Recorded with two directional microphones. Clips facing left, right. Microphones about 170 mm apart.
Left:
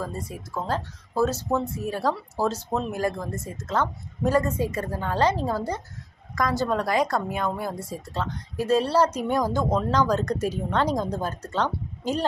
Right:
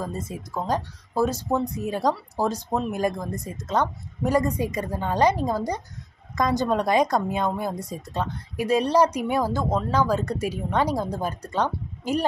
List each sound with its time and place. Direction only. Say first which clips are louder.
0.0 s a woman's voice: right 1 dB; 20° right (ahead or behind)